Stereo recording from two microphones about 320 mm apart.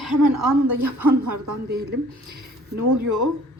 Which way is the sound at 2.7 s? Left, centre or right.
Right.